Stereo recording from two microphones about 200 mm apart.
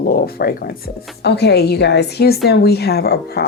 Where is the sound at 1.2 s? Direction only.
55° left (ahead or behind).